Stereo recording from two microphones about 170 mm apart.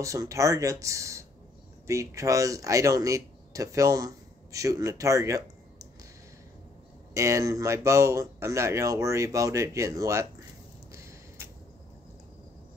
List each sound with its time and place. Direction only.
0.0 s speech: 20° right (ahead or behind)
7.2 s speech: 20° right (ahead or behind)
10.9 s a sound: 15° right (ahead or behind)